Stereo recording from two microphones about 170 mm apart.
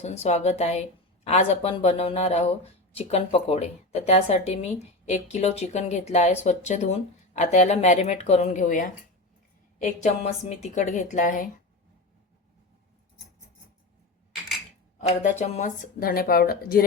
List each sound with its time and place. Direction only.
0.0 s a woman's voice: 40° left (ahead or behind)
14.9 s speech: 45° left (ahead or behind); by 16.8 s 60° left (ahead or behind)